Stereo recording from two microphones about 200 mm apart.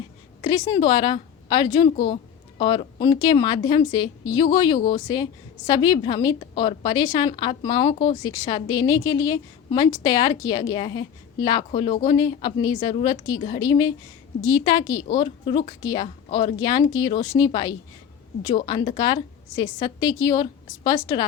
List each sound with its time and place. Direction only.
0.4 s a woman's voice: 20° left (ahead or behind)